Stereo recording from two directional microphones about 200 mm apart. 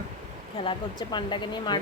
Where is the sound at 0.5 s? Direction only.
25° left (ahead or behind).